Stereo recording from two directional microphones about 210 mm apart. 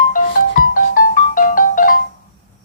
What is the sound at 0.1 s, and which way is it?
Music, 40° left (ahead or behind).